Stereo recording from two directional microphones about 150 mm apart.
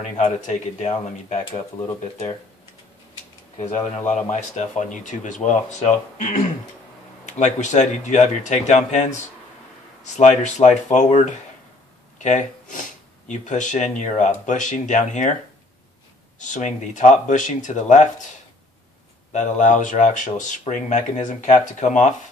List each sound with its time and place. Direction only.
0.2 s speech: 50° left (ahead or behind)
3.5 s speech: 50° left (ahead or behind)
16.3 s speech: 55° left (ahead or behind)
19.3 s speech: 55° left (ahead or behind)